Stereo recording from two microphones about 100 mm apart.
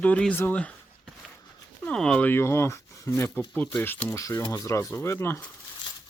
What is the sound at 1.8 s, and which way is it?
Speech, 10° left (ahead or behind).